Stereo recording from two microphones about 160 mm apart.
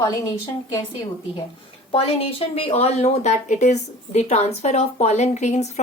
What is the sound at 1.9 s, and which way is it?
A woman's voice, 35° left (ahead or behind).